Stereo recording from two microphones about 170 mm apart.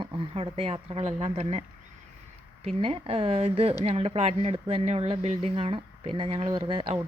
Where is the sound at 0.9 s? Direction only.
40° right (ahead or behind).